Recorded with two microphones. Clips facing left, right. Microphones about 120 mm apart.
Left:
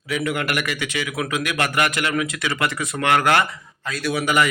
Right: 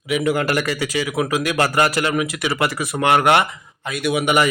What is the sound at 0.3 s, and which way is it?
A man's voice, 30° right (ahead or behind).